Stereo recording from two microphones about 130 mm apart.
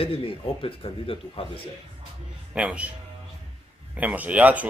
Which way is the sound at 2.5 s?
10° right (ahead or behind).